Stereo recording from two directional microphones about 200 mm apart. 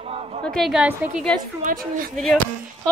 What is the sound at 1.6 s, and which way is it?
Speech, 45° right (ahead or behind).